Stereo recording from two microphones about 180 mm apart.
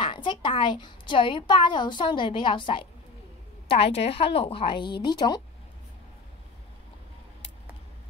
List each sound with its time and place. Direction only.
0.0 s a woman's voice: 25° left (ahead or behind)